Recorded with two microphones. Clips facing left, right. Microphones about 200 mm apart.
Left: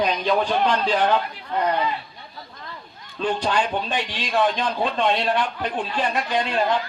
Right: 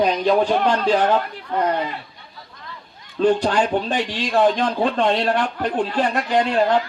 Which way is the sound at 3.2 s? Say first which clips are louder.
Right 6 dB; 45° right (ahead or behind).